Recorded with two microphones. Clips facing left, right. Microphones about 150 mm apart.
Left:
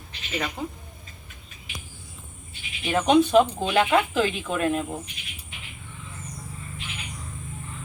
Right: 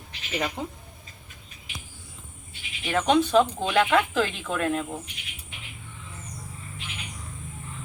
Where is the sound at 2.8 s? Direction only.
15° left (ahead or behind).